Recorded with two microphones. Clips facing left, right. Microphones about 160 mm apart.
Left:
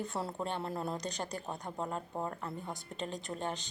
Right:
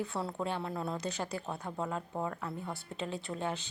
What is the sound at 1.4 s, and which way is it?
Speech, 15° left (ahead or behind).